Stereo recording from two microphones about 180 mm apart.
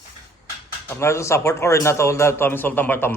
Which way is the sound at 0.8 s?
15° left (ahead or behind).